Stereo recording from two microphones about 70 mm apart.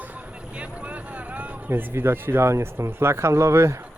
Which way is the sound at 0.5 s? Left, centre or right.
Centre.